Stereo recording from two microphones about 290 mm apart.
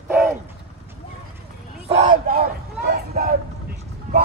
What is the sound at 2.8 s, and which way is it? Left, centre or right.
Vehicle, right.